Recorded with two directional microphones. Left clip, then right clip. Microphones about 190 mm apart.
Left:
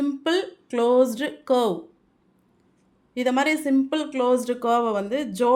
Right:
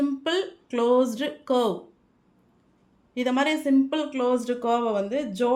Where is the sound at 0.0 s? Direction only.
20° left (ahead or behind).